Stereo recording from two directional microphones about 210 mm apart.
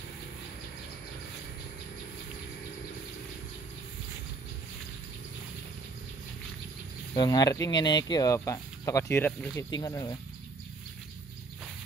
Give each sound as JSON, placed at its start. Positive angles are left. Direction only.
{"t": 7.2, "sound": "speech", "side_deg": 20}